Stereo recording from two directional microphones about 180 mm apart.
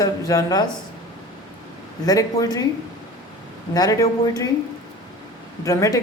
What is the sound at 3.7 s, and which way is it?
Speech, 20° left (ahead or behind).